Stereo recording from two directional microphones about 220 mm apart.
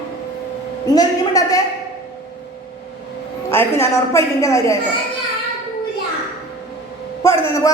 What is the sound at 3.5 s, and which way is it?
A woman's voice, 10° left (ahead or behind).